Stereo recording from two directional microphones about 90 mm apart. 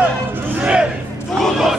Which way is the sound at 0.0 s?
15° right (ahead or behind).